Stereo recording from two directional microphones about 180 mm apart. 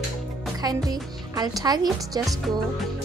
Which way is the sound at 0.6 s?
20° right (ahead or behind).